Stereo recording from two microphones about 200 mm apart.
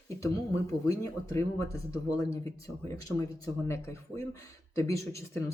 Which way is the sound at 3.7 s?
15° left (ahead or behind).